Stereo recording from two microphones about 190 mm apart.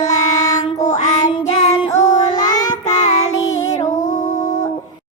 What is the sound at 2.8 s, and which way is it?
Child singing, 40° left (ahead or behind).